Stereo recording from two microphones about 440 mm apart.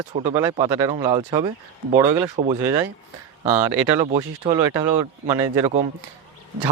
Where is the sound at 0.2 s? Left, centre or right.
Centre.